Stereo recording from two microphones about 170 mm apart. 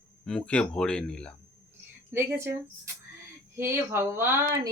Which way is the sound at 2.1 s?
15° right (ahead or behind).